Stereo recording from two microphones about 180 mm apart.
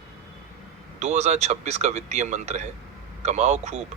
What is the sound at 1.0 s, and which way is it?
Speech, 40° right (ahead or behind).